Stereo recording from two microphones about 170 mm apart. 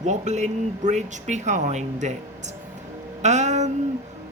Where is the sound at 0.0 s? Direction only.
45° right (ahead or behind).